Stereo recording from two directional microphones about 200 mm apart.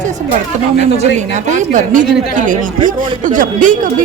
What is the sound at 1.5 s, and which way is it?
A man's voice, 40° right (ahead or behind).